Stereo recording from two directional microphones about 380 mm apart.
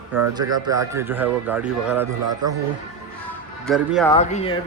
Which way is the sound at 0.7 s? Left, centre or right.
Centre.